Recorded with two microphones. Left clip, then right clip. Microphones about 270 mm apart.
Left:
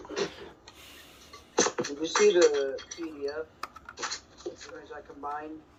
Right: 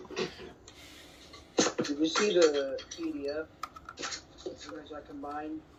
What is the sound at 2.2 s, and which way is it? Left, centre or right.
Speech, centre.